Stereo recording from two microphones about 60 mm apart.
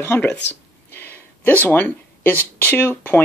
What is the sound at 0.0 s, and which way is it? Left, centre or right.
Speech, left.